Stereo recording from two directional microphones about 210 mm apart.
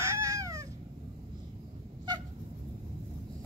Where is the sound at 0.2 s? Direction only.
15° right (ahead or behind).